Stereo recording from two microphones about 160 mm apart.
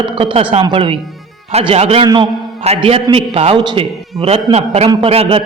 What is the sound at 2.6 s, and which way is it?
A man's voice, 40° right (ahead or behind).